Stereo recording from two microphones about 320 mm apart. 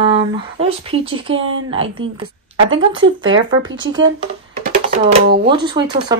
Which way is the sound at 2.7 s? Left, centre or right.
Right.